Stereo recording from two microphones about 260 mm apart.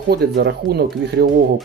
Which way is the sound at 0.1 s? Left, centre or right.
Right.